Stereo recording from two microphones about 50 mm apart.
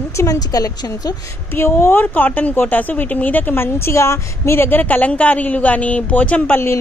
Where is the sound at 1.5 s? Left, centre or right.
Left.